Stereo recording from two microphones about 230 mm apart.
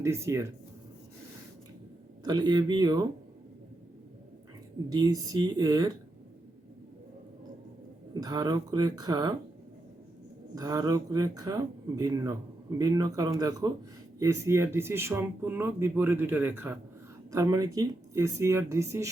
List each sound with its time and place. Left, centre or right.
0.0 s speech: centre
2.2 s speech: centre
4.9 s speech: centre
8.2 s speech: centre
10.5 s speech: centre